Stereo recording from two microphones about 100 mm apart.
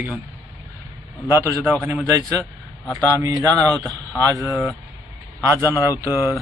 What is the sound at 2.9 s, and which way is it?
Speech, 35° right (ahead or behind).